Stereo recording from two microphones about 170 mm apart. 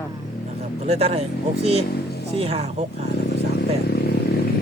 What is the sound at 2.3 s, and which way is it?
Speech, 35° right (ahead or behind).